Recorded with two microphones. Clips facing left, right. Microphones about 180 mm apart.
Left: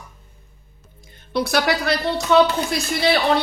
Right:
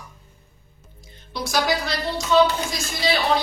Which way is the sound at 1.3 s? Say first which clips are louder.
Left 3 dB; 60° left (ahead or behind).